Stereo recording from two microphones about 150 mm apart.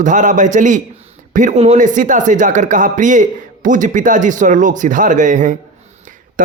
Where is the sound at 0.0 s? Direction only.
55° right (ahead or behind).